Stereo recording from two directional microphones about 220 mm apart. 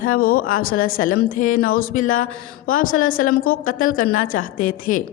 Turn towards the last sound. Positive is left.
turn(degrees=35)  # may be behind; listen again after turning